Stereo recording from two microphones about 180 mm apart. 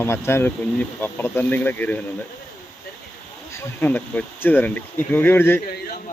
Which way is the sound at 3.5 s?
10° left (ahead or behind).